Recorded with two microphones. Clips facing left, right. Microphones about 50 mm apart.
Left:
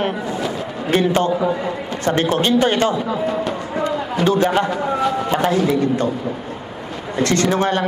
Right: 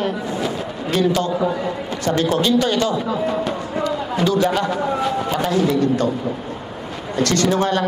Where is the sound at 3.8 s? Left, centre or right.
Left.